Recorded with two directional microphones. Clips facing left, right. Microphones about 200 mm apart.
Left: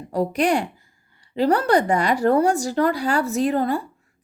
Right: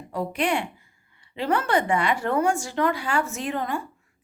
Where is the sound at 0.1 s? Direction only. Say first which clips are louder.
Left 5 dB; 40° left (ahead or behind).